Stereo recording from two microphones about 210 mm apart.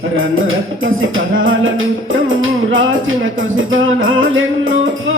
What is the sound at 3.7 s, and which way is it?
Music, 70° right (ahead or behind).